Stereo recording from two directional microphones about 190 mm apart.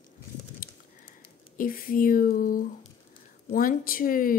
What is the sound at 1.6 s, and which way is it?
A woman's voice, 50° left (ahead or behind).